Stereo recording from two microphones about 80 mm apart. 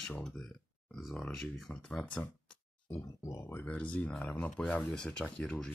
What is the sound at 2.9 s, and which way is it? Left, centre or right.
Speech, left.